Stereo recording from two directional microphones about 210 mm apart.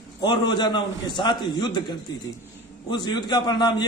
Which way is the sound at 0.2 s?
20° left (ahead or behind).